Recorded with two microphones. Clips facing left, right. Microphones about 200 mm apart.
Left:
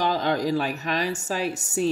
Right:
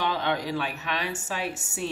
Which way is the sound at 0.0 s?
40° left (ahead or behind).